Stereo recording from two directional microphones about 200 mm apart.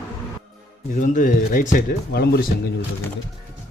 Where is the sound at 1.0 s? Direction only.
40° left (ahead or behind).